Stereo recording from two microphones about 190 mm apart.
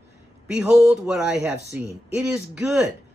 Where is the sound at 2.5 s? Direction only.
5° right (ahead or behind).